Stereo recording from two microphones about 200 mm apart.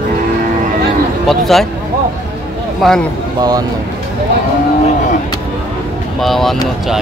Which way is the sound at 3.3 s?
20° right (ahead or behind).